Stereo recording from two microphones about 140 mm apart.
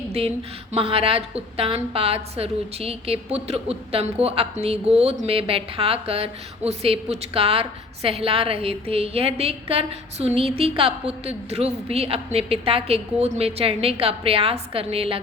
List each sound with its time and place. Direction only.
0.1 s a woman's voice: 50° right (ahead or behind)